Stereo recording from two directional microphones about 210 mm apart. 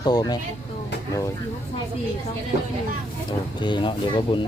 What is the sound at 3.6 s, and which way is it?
Speech, 20° left (ahead or behind).